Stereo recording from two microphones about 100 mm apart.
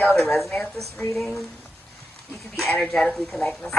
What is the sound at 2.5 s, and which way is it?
Speech, 5° left (ahead or behind).